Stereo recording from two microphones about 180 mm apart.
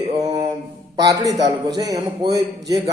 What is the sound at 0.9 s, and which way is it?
A man's voice, 20° right (ahead or behind).